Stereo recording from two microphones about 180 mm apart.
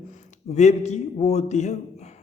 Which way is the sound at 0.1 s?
40° left (ahead or behind).